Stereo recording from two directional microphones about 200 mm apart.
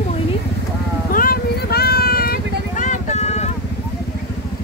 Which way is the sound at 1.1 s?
45° left (ahead or behind).